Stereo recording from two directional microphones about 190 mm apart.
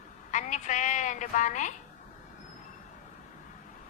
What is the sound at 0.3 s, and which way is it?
A woman's voice, 40° left (ahead or behind).